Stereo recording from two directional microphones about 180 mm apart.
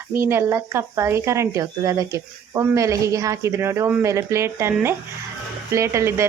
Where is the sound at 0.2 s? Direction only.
15° right (ahead or behind).